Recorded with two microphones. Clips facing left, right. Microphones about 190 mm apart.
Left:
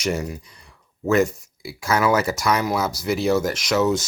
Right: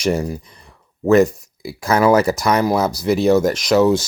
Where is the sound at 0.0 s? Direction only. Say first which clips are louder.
Right 5 dB; 35° right (ahead or behind).